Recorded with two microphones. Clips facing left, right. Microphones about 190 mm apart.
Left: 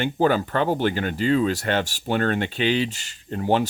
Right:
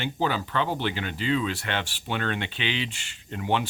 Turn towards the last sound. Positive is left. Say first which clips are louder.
# left 6 dB
turn(degrees=40)  # may be behind; listen again after turning